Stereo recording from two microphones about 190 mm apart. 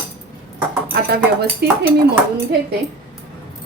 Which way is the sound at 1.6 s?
60° right (ahead or behind).